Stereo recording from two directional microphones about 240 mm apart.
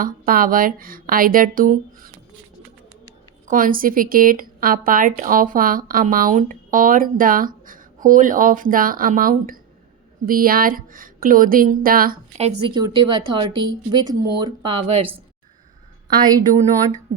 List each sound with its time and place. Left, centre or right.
0.0 s speech: right
3.4 s speech: right
16.1 s a woman's voice: centre